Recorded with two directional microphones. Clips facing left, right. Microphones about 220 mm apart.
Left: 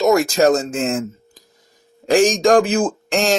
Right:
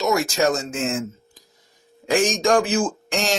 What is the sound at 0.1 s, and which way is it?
Speech, 40° left (ahead or behind).